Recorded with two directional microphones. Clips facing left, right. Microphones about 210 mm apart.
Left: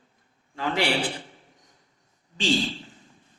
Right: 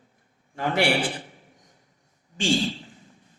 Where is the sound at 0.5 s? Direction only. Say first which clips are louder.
Right 1 dB; 50° right (ahead or behind).